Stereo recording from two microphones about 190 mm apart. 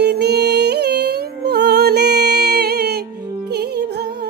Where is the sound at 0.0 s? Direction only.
60° right (ahead or behind).